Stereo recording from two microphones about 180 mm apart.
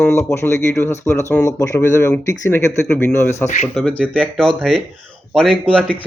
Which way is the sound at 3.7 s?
Centre (ahead or behind).